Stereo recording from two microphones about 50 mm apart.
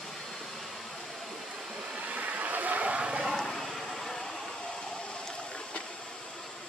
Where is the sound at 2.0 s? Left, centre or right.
Right.